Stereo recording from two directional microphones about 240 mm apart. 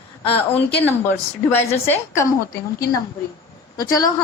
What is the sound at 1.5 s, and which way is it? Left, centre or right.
Speech, centre.